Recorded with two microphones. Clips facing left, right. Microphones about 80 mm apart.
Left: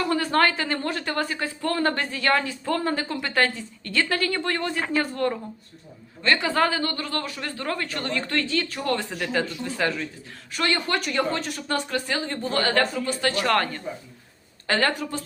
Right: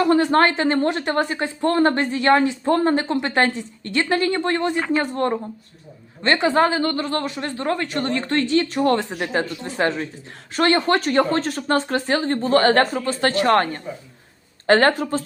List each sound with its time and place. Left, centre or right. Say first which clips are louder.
0.2 s speech: right 5 dB; right
13.1 s a woman's voice: right 5 dB; right